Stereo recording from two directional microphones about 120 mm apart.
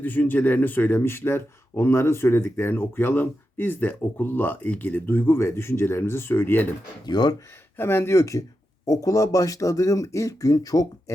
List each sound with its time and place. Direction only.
0.0 s speech: 15° left (ahead or behind)
7.0 s speech: 35° left (ahead or behind)
7.8 s speech: 20° left (ahead or behind)